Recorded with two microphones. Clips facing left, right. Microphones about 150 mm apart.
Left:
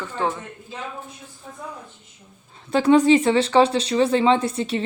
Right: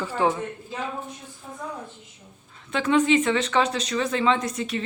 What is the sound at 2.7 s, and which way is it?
Speech, 35° left (ahead or behind).